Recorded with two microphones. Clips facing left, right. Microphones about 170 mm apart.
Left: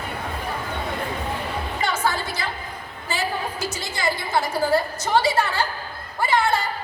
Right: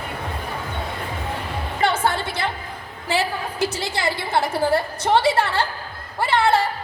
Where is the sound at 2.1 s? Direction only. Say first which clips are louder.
Right 3 dB; 60° right (ahead or behind).